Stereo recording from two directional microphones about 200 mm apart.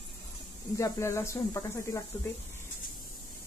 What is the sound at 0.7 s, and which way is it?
Speech, 15° left (ahead or behind).